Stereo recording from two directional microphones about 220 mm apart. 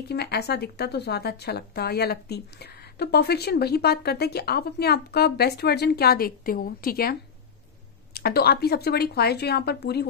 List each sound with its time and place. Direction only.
0.1 s a woman's voice: 45° left (ahead or behind)